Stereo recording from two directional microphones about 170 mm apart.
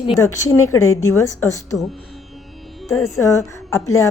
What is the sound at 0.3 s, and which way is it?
A woman's voice, 15° left (ahead or behind).